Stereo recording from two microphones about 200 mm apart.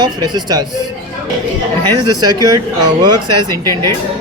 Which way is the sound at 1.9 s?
20° right (ahead or behind).